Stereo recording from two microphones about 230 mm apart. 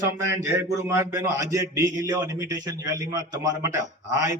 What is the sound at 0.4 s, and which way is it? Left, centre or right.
A man's voice, centre.